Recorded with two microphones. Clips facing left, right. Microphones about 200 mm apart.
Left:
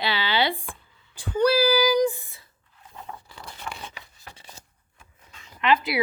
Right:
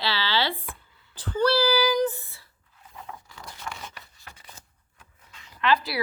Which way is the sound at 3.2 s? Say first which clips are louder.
Left 1 dB; 30° left (ahead or behind).